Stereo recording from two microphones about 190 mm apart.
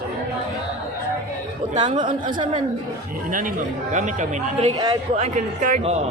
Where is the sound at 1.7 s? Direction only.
25° right (ahead or behind).